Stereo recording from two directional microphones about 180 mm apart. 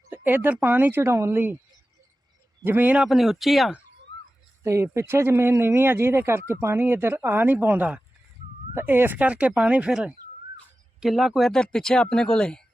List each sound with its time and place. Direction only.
0.1 s speech: 10° right (ahead or behind)
2.6 s speech: 10° right (ahead or behind)
4.1 s a sound: 25° left (ahead or behind)
4.6 s speech: 15° right (ahead or behind); by 12.6 s 5° left (ahead or behind)